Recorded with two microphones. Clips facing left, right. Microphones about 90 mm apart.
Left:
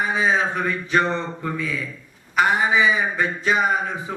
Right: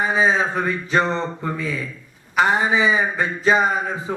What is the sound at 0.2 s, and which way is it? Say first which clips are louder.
Speech: right 2 dB; 25° right (ahead or behind).